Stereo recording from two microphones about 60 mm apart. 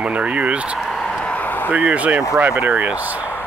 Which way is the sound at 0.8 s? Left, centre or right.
Centre.